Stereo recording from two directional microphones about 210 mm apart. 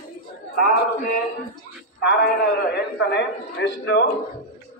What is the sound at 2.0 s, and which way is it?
A man's voice, 50° left (ahead or behind).